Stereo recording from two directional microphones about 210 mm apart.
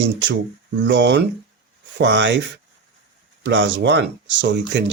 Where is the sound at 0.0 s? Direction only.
60° right (ahead or behind).